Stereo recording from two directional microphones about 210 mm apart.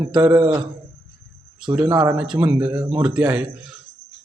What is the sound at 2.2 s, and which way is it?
A man's voice, 5° right (ahead or behind).